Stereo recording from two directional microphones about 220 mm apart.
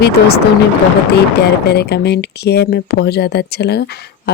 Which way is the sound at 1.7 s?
50° left (ahead or behind).